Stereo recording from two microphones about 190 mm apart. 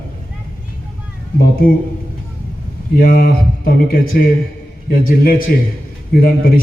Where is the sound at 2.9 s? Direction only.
50° left (ahead or behind).